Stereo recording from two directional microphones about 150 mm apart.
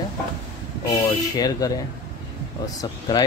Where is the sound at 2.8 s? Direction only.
25° left (ahead or behind).